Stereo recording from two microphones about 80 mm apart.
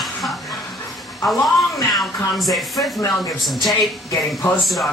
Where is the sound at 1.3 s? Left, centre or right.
Centre.